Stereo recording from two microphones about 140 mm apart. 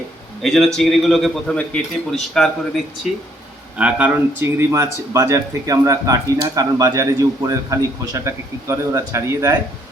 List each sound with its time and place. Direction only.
0.4 s a man's voice: centre (ahead or behind)
3.8 s speech: 10° right (ahead or behind)